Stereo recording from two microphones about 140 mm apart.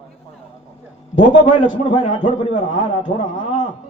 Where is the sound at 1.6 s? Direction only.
40° left (ahead or behind).